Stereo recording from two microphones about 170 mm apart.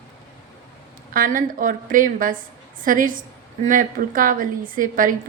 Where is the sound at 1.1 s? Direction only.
55° right (ahead or behind).